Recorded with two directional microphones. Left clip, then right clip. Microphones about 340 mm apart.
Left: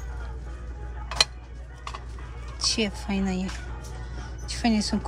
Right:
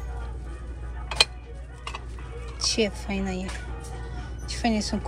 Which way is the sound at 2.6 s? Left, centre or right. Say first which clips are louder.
Right 1 dB; centre.